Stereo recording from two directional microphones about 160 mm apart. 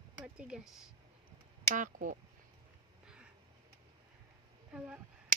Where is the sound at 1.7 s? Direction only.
55° right (ahead or behind).